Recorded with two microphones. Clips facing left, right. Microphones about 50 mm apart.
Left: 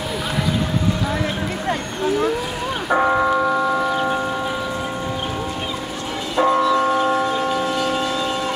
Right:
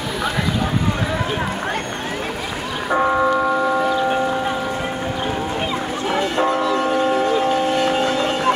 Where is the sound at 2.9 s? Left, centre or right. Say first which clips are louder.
Even; centre.